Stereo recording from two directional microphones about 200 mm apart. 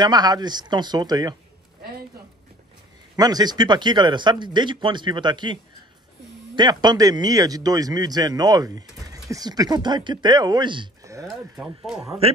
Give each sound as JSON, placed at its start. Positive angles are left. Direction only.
{"t": 0.0, "sound": "speech", "side_deg": -20}
{"t": 3.2, "sound": "speech", "side_deg": -20}
{"t": 11.2, "sound": "speech", "side_deg": 0}
{"t": 12.2, "sound": "speech", "side_deg": -30}